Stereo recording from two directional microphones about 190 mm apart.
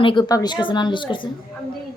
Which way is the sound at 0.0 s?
25° left (ahead or behind).